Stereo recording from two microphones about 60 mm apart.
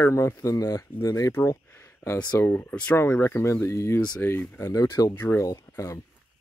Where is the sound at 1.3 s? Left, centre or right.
Left.